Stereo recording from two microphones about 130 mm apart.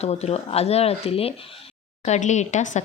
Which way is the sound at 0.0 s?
55° left (ahead or behind).